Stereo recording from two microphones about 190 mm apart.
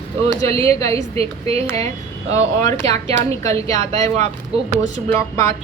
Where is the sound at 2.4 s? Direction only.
15° left (ahead or behind).